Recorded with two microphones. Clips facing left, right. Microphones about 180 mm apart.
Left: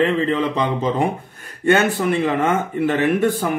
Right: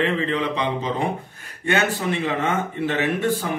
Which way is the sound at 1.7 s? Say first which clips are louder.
Left 5 dB; 50° left (ahead or behind).